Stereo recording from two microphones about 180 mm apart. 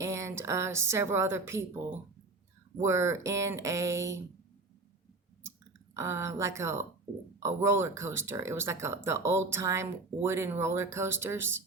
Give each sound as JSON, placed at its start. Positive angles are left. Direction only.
{"t": 0.0, "sound": "speech", "side_deg": -15}
{"t": 5.9, "sound": "speech", "side_deg": -15}